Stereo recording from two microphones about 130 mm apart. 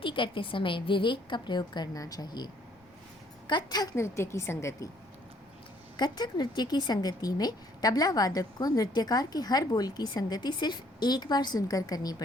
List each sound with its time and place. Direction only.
0.0 s a woman's voice: 40° left (ahead or behind); by 4.9 s 20° left (ahead or behind)
6.0 s a woman's voice: 35° left (ahead or behind)